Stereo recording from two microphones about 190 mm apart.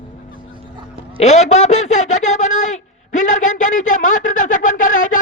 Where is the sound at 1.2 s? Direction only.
35° left (ahead or behind).